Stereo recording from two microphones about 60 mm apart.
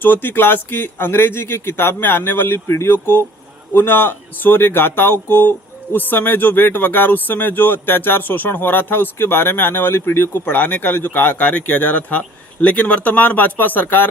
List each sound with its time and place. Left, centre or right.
0.0 s speech: left